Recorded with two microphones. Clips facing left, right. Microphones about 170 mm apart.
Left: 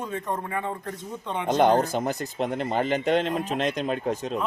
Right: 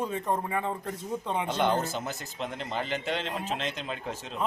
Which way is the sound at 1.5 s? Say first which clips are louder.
Left 9 dB; 50° left (ahead or behind).